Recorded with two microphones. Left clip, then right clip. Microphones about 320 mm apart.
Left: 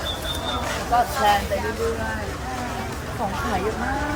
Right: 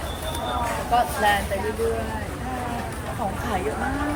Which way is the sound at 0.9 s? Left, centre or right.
Centre.